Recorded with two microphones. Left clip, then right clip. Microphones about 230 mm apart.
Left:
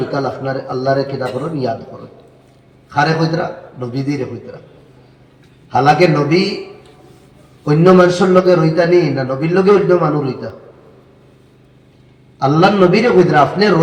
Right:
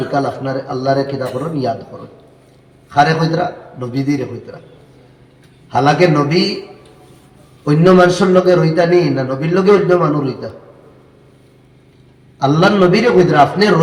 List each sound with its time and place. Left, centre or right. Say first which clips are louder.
0.1 s a man's voice: right 1 dB; right
2.9 s a man's voice: right 2 dB; right
5.7 s a man's voice: left 1 dB; right
7.6 s a man's voice: even; right
12.4 s a man's voice: left 1 dB; right